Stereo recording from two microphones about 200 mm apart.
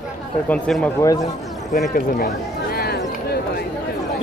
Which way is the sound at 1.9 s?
45° left (ahead or behind).